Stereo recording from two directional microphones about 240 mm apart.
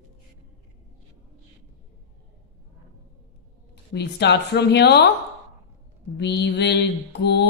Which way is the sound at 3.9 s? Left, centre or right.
Left.